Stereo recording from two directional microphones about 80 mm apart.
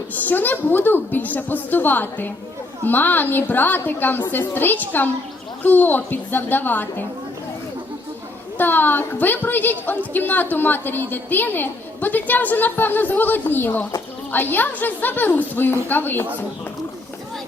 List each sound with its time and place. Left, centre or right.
0.1 s a woman's voice: left
8.5 s a woman's voice: left